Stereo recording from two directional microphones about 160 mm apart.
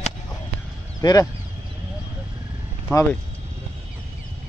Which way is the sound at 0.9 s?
20° left (ahead or behind).